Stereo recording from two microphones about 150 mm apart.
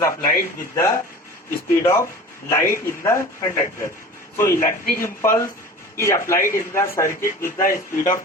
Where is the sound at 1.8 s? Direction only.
20° left (ahead or behind).